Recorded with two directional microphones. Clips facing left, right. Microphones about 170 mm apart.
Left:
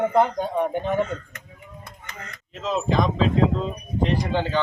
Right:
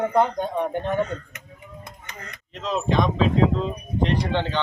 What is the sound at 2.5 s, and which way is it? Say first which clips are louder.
Speech: even; centre (ahead or behind).